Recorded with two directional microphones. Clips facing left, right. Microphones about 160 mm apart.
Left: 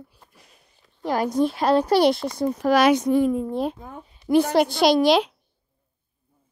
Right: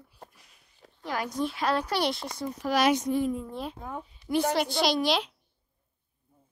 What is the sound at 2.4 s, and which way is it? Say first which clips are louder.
Speech: left 7 dB; 60° left (ahead or behind).